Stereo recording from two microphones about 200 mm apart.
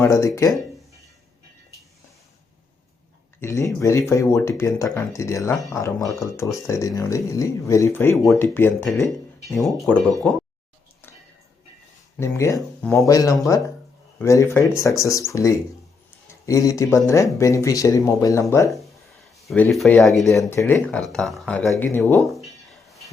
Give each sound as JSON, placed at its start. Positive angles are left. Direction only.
{"t": 0.0, "sound": "speech", "side_deg": 15}
{"t": 3.4, "sound": "speech", "side_deg": 15}
{"t": 8.1, "sound": "speech", "side_deg": 0}
{"t": 9.6, "sound": "speech", "side_deg": 0}
{"t": 12.2, "sound": "speech", "side_deg": 15}
{"t": 19.5, "sound": "speech", "side_deg": 5}
{"t": 20.5, "sound": "speech", "side_deg": 10}
{"t": 22.3, "sound": "a sound", "side_deg": 0}